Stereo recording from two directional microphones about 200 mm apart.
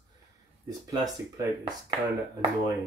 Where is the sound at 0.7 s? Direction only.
20° right (ahead or behind).